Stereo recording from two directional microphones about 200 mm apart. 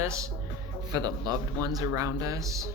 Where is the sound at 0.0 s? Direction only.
15° right (ahead or behind).